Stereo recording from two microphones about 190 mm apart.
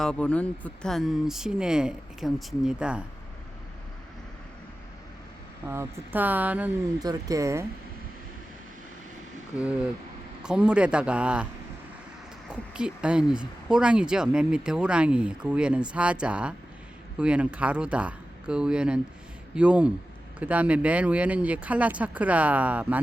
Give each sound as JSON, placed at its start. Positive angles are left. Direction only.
{"t": 0.0, "sound": "speech", "side_deg": 5}
{"t": 5.6, "sound": "speech", "side_deg": -15}
{"t": 7.0, "sound": "speech", "side_deg": -20}
{"t": 9.6, "sound": "speech", "side_deg": -5}
{"t": 12.5, "sound": "speech", "side_deg": -5}